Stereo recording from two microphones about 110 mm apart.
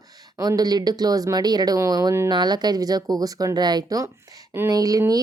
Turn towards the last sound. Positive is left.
turn(degrees=-35)  # may be behind; listen again after turning